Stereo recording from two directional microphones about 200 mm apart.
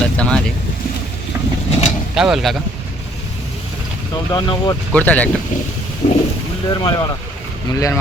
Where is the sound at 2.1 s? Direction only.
Centre (ahead or behind).